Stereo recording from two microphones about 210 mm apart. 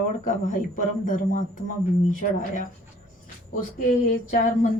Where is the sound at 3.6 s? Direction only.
40° left (ahead or behind).